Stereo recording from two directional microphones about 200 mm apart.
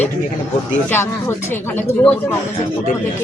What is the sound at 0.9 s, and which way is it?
Speech, 10° left (ahead or behind).